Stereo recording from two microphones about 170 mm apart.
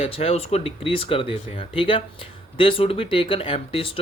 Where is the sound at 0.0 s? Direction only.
35° left (ahead or behind).